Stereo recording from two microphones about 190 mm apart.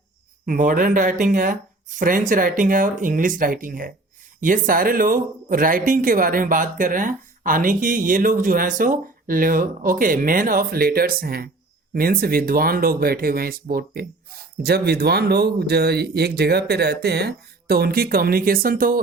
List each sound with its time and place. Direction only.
0.4 s a man's voice: 45° right (ahead or behind)